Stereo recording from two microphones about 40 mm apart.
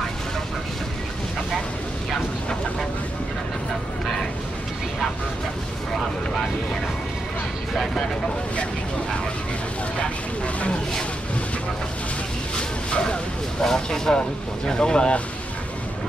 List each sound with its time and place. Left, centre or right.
7.7 s speech: centre
12.5 s speech: left